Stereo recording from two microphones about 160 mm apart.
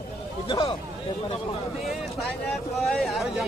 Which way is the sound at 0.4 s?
30° left (ahead or behind).